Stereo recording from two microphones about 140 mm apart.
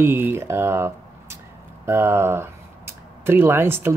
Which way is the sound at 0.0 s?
15° right (ahead or behind).